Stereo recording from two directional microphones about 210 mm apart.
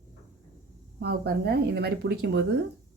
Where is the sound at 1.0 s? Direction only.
50° right (ahead or behind).